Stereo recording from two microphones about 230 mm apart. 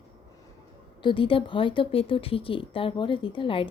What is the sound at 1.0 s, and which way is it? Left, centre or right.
Speech, left.